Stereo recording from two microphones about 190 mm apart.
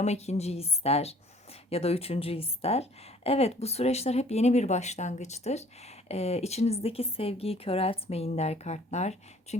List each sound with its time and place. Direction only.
0.0 s speech: 35° left (ahead or behind)